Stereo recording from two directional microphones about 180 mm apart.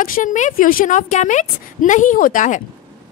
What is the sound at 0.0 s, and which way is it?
Speech, 45° left (ahead or behind).